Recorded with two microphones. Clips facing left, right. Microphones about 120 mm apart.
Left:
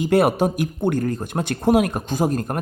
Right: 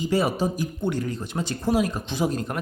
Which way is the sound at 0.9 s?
50° left (ahead or behind).